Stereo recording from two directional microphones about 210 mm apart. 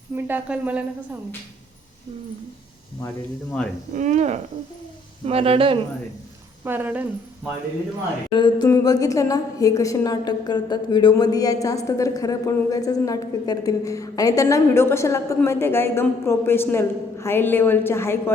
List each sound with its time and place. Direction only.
0.3 s speech: 5° right (ahead or behind)
3.9 s speech: 35° right (ahead or behind)
6.7 s speech: 10° right (ahead or behind)
8.3 s a woman's voice: 20° left (ahead or behind)